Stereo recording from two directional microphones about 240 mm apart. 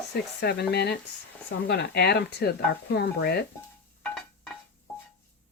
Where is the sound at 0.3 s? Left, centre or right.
Left.